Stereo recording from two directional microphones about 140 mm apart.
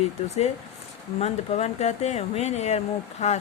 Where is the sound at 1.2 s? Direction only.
50° left (ahead or behind).